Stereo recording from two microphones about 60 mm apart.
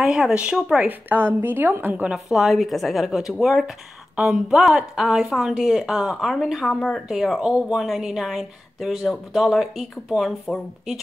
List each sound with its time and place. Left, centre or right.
0.0 s speech: centre
0.7 s a woman's voice: right
2.1 s a woman's voice: centre
6.1 s a woman's voice: centre